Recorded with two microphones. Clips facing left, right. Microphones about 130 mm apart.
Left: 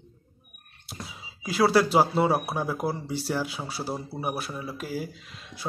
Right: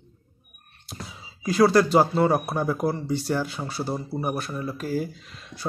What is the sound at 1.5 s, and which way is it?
Speech, 5° left (ahead or behind).